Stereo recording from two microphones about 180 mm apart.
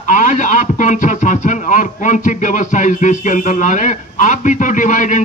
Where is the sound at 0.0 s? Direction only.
45° left (ahead or behind).